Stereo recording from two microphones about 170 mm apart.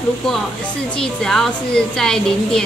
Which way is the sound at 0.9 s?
5° left (ahead or behind).